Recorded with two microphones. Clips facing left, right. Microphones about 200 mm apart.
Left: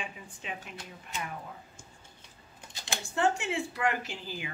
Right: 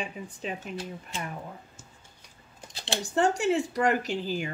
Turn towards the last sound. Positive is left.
turn(degrees=-40)  # may be behind; listen again after turning